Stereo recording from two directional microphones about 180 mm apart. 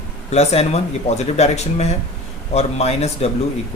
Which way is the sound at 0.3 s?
35° left (ahead or behind).